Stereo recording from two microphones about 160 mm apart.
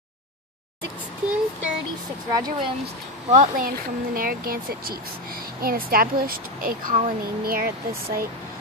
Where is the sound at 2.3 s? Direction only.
25° right (ahead or behind).